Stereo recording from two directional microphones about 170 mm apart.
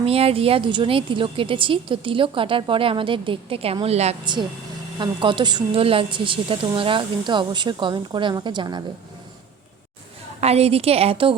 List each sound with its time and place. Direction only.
0.0 s a woman's voice: 35° right (ahead or behind)
4.9 s a woman's voice: 30° right (ahead or behind)
10.4 s a woman's voice: 35° right (ahead or behind)